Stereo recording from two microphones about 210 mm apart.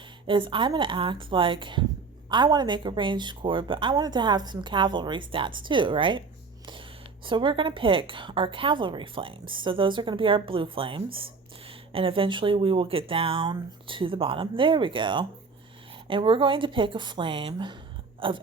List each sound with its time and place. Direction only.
0.3 s a woman's voice: 25° right (ahead or behind)
7.3 s a woman's voice: 25° right (ahead or behind)